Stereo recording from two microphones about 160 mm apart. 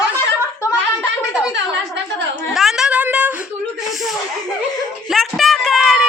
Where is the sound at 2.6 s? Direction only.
Centre (ahead or behind).